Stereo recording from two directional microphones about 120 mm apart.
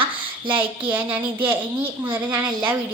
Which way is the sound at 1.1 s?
15° right (ahead or behind).